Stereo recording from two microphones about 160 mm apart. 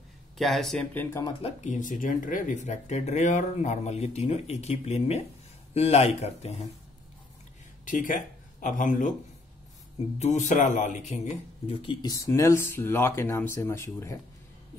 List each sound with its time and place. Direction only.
0.4 s speech: centre (ahead or behind)
1.4 s speech: 45° left (ahead or behind)
7.8 s speech: 55° left (ahead or behind)
10.1 s speech: 45° left (ahead or behind); by 14.2 s 15° left (ahead or behind)